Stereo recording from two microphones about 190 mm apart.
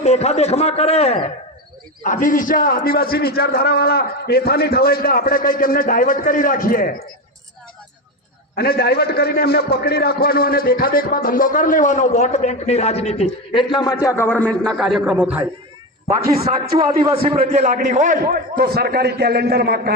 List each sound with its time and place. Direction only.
0.0 s a man's voice: 35° left (ahead or behind)
8.5 s a man's voice: 55° left (ahead or behind); by 16.5 s 15° right (ahead or behind)
16.7 s a man's voice: 30° right (ahead or behind); by 19.9 s 55° right (ahead or behind)